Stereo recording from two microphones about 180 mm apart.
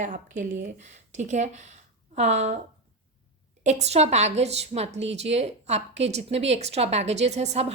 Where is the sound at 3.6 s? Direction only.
40° right (ahead or behind).